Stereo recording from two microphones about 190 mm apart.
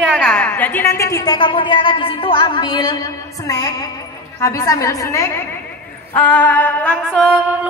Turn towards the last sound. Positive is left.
turn(degrees=-10)  # may be behind; listen again after turning